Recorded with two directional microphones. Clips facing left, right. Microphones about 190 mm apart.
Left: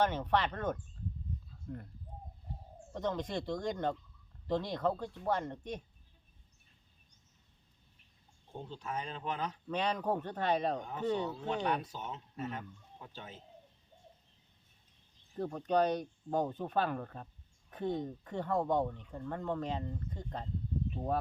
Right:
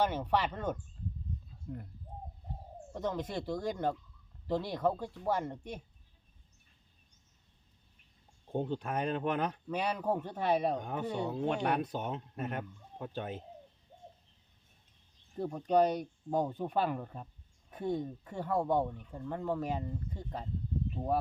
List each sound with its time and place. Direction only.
0.0 s speech: 10° right (ahead or behind)
2.9 s speech: 5° right (ahead or behind)
8.5 s speech: 60° right (ahead or behind)
9.6 s speech: 10° right (ahead or behind)
10.8 s speech: 60° right (ahead or behind)
11.0 s speech: 10° right (ahead or behind)
11.3 s speech: 55° right (ahead or behind)
15.4 s speech: 10° right (ahead or behind)